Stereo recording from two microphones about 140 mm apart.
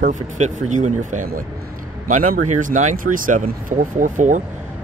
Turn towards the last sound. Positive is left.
turn(degrees=-65)  # may be behind; listen again after turning